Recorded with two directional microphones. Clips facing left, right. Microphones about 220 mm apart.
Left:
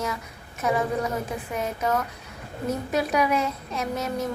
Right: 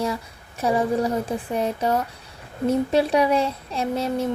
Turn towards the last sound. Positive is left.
turn(degrees=-30)  # may be behind; listen again after turning